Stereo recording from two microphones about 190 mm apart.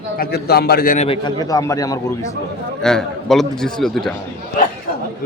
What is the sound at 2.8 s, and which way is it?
A man's voice, centre (ahead or behind).